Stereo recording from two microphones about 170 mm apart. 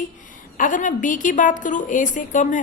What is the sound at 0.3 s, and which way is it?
A woman's voice, 50° left (ahead or behind).